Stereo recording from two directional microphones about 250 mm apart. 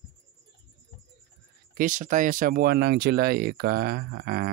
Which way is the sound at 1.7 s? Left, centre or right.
Right.